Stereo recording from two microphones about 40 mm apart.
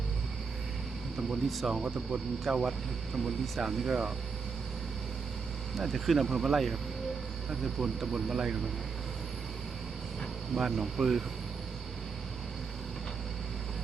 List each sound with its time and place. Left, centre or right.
1.5 s speech: centre
1.7 s speech: right
2.5 s speech: centre
5.7 s speech: centre
7.6 s speech: centre
10.5 s speech: centre